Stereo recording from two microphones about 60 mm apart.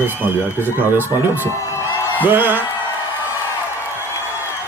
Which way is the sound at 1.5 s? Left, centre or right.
Left.